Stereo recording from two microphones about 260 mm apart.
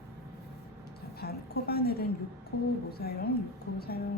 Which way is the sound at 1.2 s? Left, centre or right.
Left.